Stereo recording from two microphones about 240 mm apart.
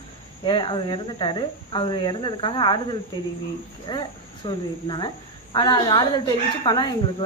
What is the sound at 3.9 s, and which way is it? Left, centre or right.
Speech, centre.